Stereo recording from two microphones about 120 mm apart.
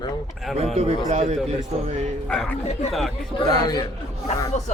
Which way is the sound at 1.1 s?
65° right (ahead or behind).